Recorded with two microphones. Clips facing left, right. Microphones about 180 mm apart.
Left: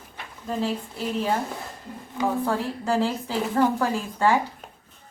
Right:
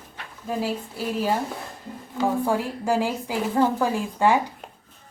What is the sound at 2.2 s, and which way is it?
A woman's voice, 10° right (ahead or behind).